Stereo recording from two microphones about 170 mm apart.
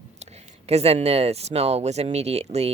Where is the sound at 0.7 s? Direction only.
40° right (ahead or behind).